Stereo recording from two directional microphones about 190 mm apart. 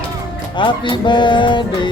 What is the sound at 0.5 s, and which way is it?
Speech, 25° left (ahead or behind).